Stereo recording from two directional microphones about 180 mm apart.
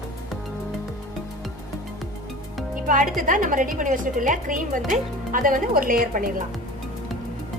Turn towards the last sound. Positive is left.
turn(degrees=-50)  # may be behind; listen again after turning